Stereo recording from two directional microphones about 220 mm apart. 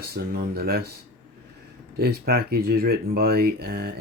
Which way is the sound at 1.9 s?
45° right (ahead or behind).